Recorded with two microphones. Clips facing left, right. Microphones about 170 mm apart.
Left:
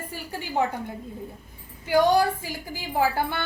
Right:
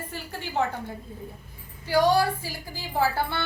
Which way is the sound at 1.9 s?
20° left (ahead or behind).